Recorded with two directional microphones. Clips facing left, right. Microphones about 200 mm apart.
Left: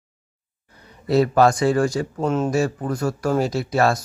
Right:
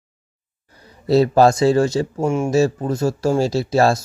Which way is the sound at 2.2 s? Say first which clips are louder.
Even; 10° right (ahead or behind).